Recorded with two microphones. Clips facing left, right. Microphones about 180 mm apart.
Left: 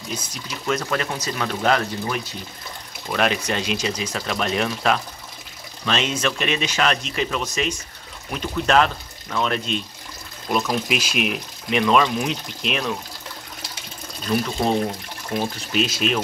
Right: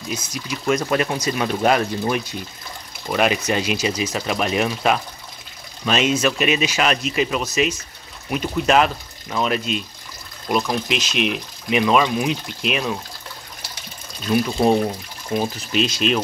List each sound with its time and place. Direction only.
0.1 s speech: 10° right (ahead or behind)
3.1 s speech: 5° right (ahead or behind)
10.5 s speech: 5° left (ahead or behind)
15.3 s speech: centre (ahead or behind)